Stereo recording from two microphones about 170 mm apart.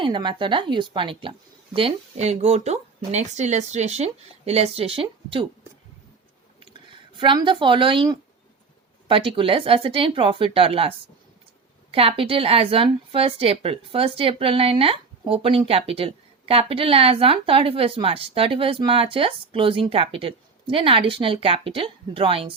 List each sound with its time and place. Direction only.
0.0 s a woman's voice: 30° right (ahead or behind)
7.2 s a woman's voice: 30° right (ahead or behind)